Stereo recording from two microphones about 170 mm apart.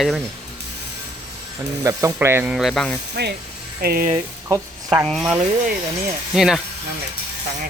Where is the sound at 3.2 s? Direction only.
75° right (ahead or behind).